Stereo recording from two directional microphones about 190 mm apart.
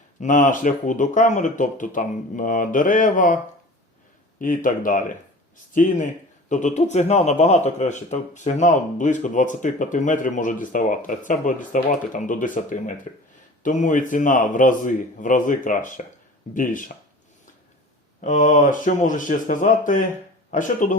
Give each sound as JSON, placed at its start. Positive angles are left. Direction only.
{"t": 0.2, "sound": "speech", "side_deg": 40}
{"t": 4.4, "sound": "speech", "side_deg": 45}
{"t": 18.2, "sound": "speech", "side_deg": 40}